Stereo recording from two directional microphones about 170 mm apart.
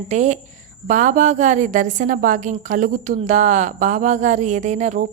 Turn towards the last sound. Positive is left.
turn(degrees=-45)  # may be behind; listen again after turning